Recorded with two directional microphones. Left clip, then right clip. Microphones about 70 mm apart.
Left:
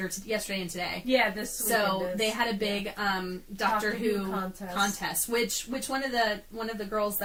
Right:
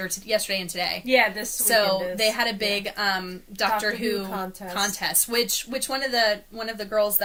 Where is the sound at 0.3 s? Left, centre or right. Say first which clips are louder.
Right 8 dB; right.